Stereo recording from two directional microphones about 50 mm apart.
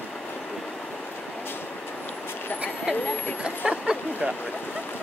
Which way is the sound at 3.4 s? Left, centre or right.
Right.